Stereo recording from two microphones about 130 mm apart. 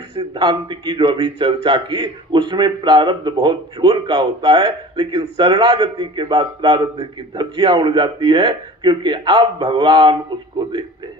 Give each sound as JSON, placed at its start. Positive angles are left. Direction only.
{"t": 0.3, "sound": "speech", "side_deg": -35}